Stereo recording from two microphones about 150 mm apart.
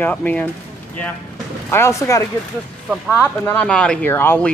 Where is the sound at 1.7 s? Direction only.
20° left (ahead or behind).